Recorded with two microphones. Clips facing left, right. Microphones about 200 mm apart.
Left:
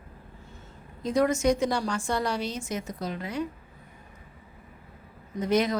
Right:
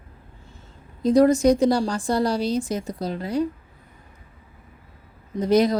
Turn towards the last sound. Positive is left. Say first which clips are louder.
# right 6 dB
turn(degrees=-35)  # may be behind; listen again after turning